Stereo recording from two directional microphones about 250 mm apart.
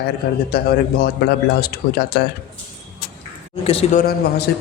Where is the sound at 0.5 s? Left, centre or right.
Left.